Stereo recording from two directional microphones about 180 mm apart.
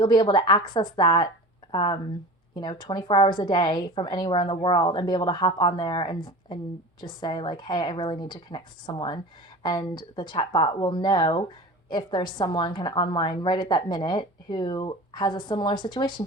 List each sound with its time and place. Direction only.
0.0 s speech: 25° left (ahead or behind)